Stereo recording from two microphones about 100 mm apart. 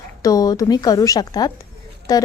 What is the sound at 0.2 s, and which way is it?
A woman's voice, 35° left (ahead or behind).